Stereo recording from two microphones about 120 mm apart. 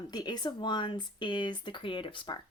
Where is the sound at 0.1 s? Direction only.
35° left (ahead or behind).